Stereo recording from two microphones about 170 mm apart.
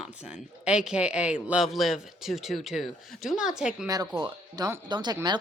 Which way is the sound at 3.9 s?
20° right (ahead or behind).